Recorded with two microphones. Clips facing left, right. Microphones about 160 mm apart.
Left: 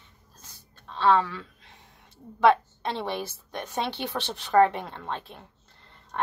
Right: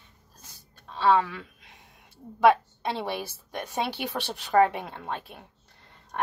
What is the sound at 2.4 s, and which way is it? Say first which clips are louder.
Speech: even; 10° right (ahead or behind).